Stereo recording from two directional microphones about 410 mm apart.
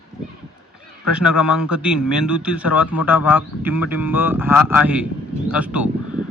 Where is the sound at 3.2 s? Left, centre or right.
Left.